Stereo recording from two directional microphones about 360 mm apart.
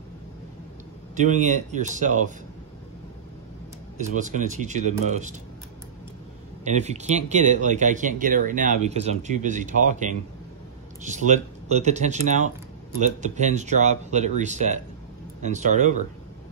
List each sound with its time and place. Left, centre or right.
1.1 s speech: centre
4.0 s speech: right
6.6 s speech: centre